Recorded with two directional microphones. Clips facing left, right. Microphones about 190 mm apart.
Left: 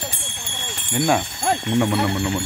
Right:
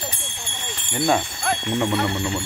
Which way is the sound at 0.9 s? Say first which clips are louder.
Left 1 dB; 5° left (ahead or behind).